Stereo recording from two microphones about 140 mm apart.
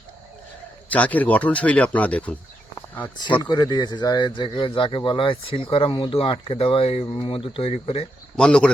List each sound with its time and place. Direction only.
0.9 s a man's voice: 10° left (ahead or behind)
3.5 s speech: 30° left (ahead or behind)
8.4 s a man's voice: 5° left (ahead or behind)